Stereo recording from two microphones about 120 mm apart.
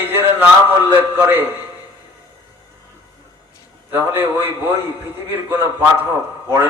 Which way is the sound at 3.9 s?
15° right (ahead or behind).